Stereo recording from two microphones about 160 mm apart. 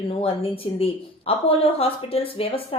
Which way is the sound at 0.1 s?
35° left (ahead or behind).